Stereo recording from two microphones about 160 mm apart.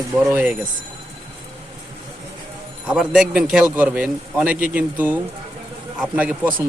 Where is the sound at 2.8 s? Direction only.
5° right (ahead or behind).